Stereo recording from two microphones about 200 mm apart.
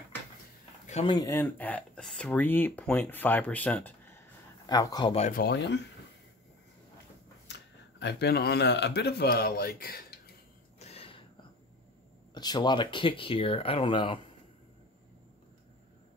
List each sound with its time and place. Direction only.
0.8 s a sound: 35° left (ahead or behind)
1.1 s speech: 15° left (ahead or behind)
5.1 s speech: 35° left (ahead or behind)
5.4 s speech: 60° left (ahead or behind)
7.4 s speech: 60° left (ahead or behind)
10.8 s a sound: 30° left (ahead or behind)
12.4 s speech: 20° left (ahead or behind)